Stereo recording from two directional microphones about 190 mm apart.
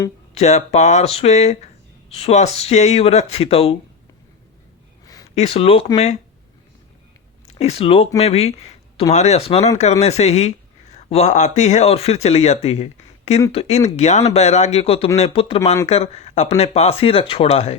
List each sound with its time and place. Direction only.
0.3 s speech: 35° left (ahead or behind)
5.3 s speech: 35° left (ahead or behind)
7.4 s speech: 35° left (ahead or behind)